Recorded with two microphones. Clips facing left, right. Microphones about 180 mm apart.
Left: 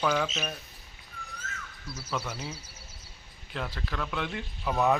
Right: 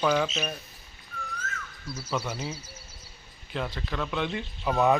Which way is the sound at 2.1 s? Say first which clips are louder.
Right 3 dB; centre (ahead or behind).